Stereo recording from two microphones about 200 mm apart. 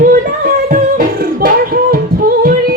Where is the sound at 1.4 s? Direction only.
45° right (ahead or behind).